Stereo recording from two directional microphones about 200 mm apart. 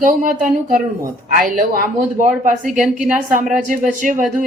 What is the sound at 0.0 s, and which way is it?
A woman's voice, 40° right (ahead or behind).